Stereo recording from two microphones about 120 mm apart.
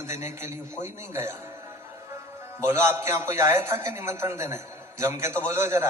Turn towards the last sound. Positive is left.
turn(degrees=-20)  # may be behind; listen again after turning